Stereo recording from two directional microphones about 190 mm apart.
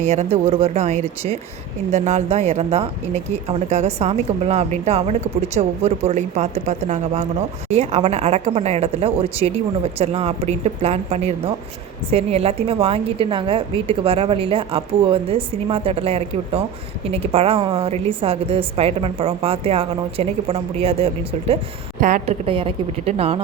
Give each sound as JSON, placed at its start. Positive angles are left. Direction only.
{"t": 0.0, "sound": "a woman's voice", "side_deg": -35}
{"t": 22.0, "sound": "a woman's voice", "side_deg": -40}
{"t": 22.4, "sound": "a woman's voice", "side_deg": -30}